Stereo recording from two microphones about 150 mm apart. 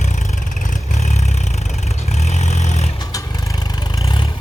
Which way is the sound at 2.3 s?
50° left (ahead or behind).